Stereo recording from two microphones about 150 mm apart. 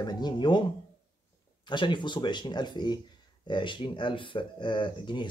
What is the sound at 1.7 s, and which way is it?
Speech, 30° left (ahead or behind).